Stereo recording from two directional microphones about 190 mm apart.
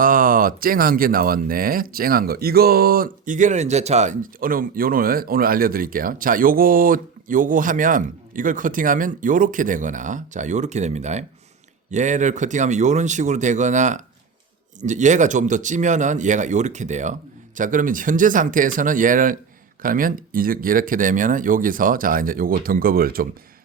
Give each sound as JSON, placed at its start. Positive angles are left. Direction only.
{"t": 0.0, "sound": "speech", "side_deg": -45}